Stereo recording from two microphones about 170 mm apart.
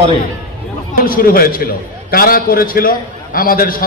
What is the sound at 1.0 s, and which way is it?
A man's voice, 60° left (ahead or behind).